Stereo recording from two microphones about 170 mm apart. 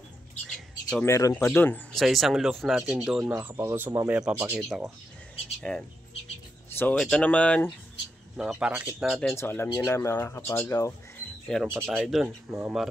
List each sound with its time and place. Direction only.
0.5 s bird: 5° left (ahead or behind)
1.0 s speech: 20° left (ahead or behind)
2.0 s speech: centre (ahead or behind)
3.3 s speech: 15° right (ahead or behind); by 7.7 s 5° left (ahead or behind)
8.4 s speech: 5° right (ahead or behind)
9.4 s speech: 15° left (ahead or behind)
11.4 s speech: 5° left (ahead or behind)
11.7 s speech: 10° right (ahead or behind)